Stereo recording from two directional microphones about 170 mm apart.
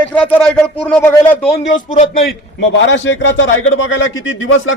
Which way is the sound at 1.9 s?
50° left (ahead or behind).